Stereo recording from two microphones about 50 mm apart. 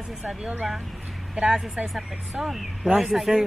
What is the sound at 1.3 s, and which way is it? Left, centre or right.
Speech, centre.